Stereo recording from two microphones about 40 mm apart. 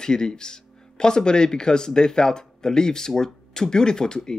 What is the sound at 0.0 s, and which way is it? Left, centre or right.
Speech, centre.